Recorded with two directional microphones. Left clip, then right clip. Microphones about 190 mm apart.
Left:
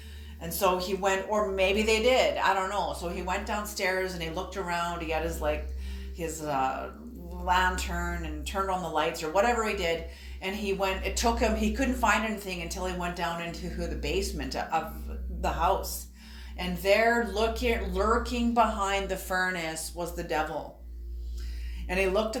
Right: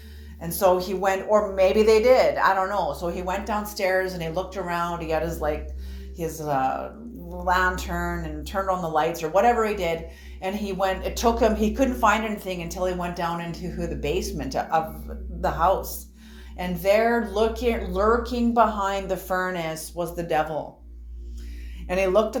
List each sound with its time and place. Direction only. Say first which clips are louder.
0.4 s speech: right 6 dB; 35° right (ahead or behind)
2.0 s speech: right 6 dB; 10° right (ahead or behind)
2.6 s a woman's voice: right 5 dB; 30° right (ahead or behind)
21.8 s speech: right 6 dB; 35° right (ahead or behind)